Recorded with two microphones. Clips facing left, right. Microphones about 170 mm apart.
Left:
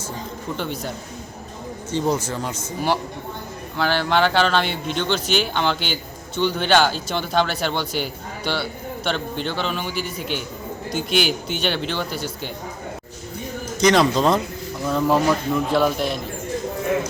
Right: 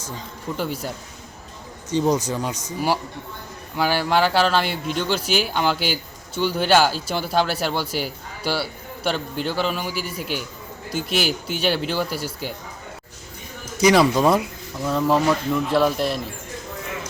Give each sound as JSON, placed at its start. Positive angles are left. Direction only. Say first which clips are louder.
{"t": 0.5, "sound": "speech", "louder": "right 2 dB", "side_deg": -5}
{"t": 1.9, "sound": "a man's voice", "louder": "right 2 dB", "side_deg": -15}
{"t": 13.7, "sound": "speech", "louder": "right 1 dB", "side_deg": -10}
{"t": 14.8, "sound": "a man's voice", "louder": "even", "side_deg": 0}